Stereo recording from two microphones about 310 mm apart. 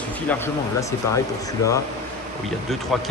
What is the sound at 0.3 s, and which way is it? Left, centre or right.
Speech, centre.